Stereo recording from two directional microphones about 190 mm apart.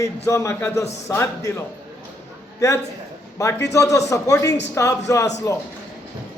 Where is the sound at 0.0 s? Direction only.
15° left (ahead or behind).